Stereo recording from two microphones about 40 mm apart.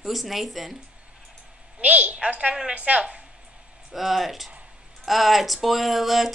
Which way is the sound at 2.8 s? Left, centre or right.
Right.